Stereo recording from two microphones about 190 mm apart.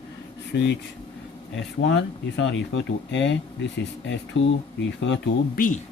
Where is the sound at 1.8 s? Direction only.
70° left (ahead or behind).